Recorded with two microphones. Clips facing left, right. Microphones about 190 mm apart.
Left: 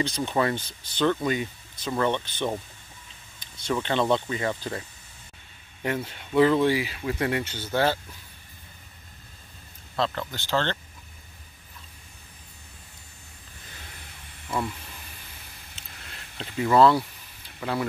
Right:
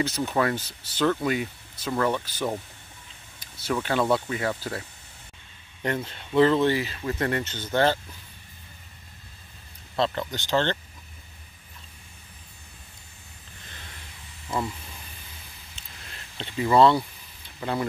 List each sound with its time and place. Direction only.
0.0 s speech: 5° right (ahead or behind)
3.3 s a sound: 5° right (ahead or behind)
3.8 s speech: 5° right (ahead or behind)
5.8 s speech: 10° left (ahead or behind)
10.1 s speech: 15° right (ahead or behind)
15.7 s a sound: centre (ahead or behind)
17.6 s speech: centre (ahead or behind)